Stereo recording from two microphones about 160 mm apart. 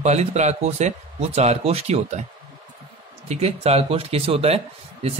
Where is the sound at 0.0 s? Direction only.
45° right (ahead or behind).